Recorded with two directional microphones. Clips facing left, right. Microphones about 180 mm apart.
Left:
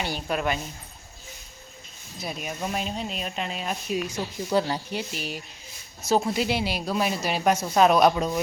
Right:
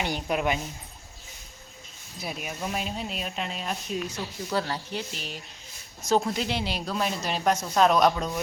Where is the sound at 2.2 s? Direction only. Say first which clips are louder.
Left 2 dB; 5° right (ahead or behind).